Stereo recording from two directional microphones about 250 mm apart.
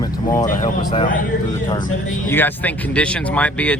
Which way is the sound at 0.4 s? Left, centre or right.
Left.